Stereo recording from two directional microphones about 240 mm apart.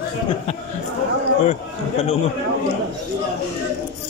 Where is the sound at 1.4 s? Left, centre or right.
Left.